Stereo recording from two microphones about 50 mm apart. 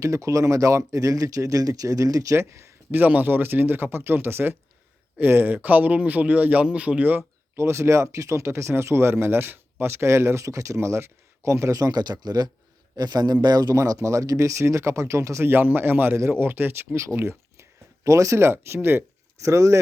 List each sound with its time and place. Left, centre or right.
0.0 s speech: right
2.9 s speech: right
7.5 s speech: right
8.1 s speech: right
8.7 s speech: right
13.7 s speech: right
15.4 s speech: right
16.9 s speech: right
17.2 s a sound: right
18.0 s speech: right
19.4 s speech: right